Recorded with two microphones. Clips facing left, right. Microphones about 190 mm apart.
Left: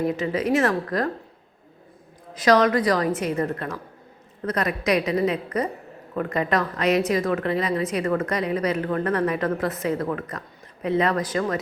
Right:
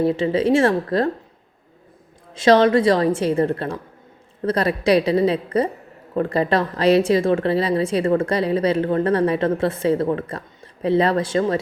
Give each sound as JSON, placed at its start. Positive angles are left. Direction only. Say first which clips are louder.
{"t": 0.0, "sound": "a woman's voice", "louder": "right 5 dB", "side_deg": -30}
{"t": 2.3, "sound": "a woman's voice", "louder": "right 4 dB", "side_deg": -25}